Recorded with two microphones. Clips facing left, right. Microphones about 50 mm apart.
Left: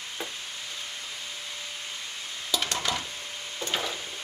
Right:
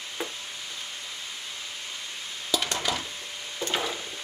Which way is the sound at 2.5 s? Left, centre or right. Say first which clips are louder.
Right 1 dB; centre.